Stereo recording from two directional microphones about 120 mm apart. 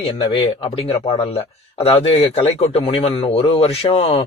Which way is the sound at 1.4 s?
55° left (ahead or behind).